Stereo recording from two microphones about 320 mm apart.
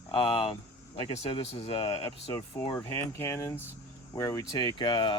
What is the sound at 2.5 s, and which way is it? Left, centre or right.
Speech, centre.